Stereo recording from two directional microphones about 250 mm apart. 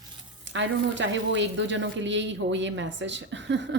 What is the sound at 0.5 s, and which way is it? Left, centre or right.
A woman's voice, right.